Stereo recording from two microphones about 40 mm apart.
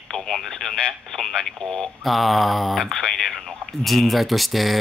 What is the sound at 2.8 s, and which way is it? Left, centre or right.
Speech, centre.